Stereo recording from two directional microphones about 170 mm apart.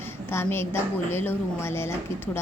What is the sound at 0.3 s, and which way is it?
A woman's voice, 15° left (ahead or behind).